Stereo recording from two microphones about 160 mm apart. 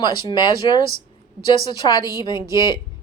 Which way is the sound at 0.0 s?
30° left (ahead or behind).